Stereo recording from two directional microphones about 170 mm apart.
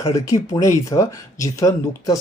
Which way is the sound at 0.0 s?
20° left (ahead or behind).